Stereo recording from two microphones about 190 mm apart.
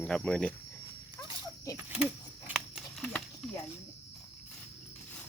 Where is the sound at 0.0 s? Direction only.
5° left (ahead or behind).